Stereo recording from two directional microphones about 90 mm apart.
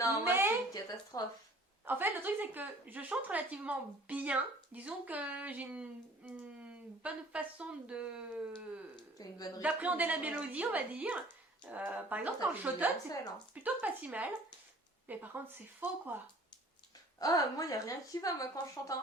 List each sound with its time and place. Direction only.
0.3 s a sound: 25° right (ahead or behind)
0.7 s speech: 50° left (ahead or behind)
1.8 s a woman's voice: 20° right (ahead or behind)
9.1 s speech: 45° left (ahead or behind)
9.6 s a woman's voice: 15° right (ahead or behind)
17.2 s a woman's voice: 45° left (ahead or behind)